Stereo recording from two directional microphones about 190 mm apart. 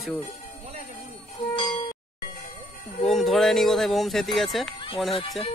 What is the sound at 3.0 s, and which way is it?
Speech, centre (ahead or behind).